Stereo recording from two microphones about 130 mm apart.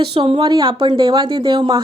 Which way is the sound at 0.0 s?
45° right (ahead or behind).